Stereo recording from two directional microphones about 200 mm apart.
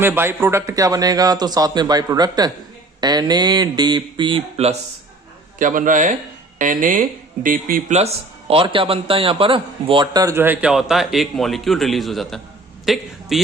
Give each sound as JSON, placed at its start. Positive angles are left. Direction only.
{"t": 0.0, "sound": "speech", "side_deg": -10}
{"t": 5.5, "sound": "a man's voice", "side_deg": -40}